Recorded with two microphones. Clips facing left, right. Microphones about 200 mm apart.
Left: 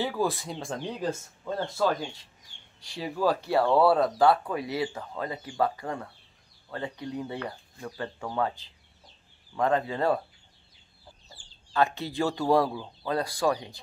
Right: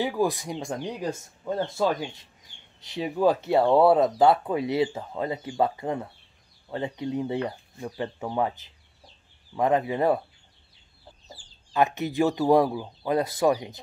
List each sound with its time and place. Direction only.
0.0 s speech: 15° right (ahead or behind)
11.7 s speech: 20° right (ahead or behind)